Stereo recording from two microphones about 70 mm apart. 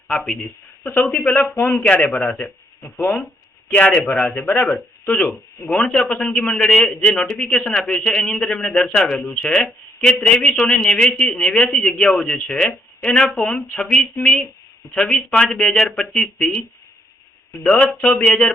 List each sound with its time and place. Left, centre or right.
0.9 s speech: left
5.9 s a man's voice: centre
17.6 s a man's voice: centre